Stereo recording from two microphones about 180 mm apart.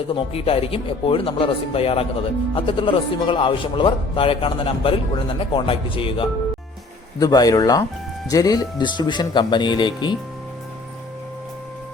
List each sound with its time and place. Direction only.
0.1 s speech: 30° left (ahead or behind)